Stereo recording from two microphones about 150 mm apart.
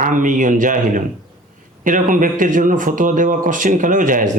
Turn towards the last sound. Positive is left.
turn(degrees=-60)  # may be behind; listen again after turning